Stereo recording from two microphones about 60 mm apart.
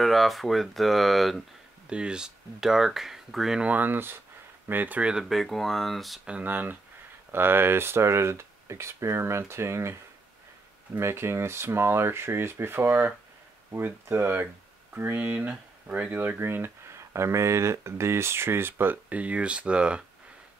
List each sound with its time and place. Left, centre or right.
0.0 s speech: centre
1.9 s speech: centre
3.6 s speech: right
5.3 s speech: centre
6.4 s speech: right
11.0 s speech: right
19.0 s speech: right